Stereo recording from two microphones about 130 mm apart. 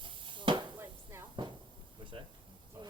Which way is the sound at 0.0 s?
40° right (ahead or behind).